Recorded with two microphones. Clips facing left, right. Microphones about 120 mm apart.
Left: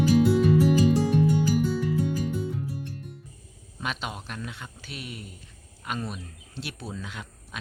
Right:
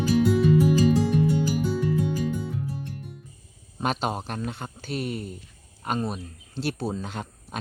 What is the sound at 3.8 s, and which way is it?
Speech, 40° right (ahead or behind).